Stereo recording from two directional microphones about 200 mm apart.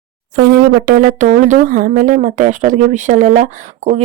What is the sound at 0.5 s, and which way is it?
Speech, 55° right (ahead or behind).